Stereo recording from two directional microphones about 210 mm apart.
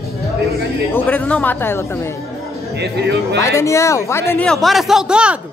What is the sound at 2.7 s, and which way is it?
Music, 50° right (ahead or behind).